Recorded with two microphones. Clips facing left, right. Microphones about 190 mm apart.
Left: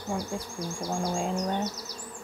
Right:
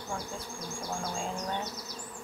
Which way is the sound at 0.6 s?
35° left (ahead or behind).